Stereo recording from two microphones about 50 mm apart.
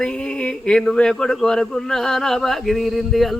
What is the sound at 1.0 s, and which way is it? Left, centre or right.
Male singing, centre.